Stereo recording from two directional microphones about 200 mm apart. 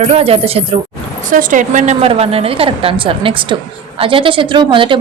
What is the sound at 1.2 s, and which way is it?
A woman's voice, 40° right (ahead or behind).